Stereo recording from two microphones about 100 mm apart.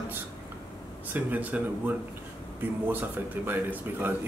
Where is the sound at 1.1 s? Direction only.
15° right (ahead or behind).